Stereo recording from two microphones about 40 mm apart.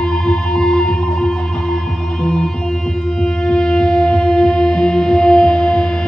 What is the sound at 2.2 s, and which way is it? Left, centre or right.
Music, centre.